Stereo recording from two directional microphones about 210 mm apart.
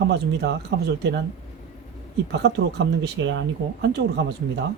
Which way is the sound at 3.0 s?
60° right (ahead or behind).